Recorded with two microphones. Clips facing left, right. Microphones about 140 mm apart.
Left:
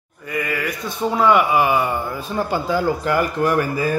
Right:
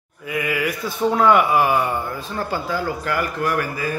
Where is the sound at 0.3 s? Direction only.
5° right (ahead or behind).